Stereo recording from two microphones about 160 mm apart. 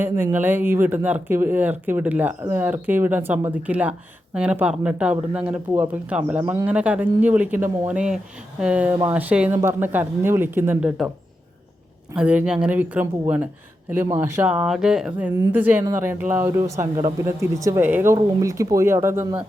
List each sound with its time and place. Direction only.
0.0 s speech: 10° right (ahead or behind)
6.4 s speech: 20° right (ahead or behind)
6.7 s speech: 10° right (ahead or behind)
12.1 s speech: 5° right (ahead or behind)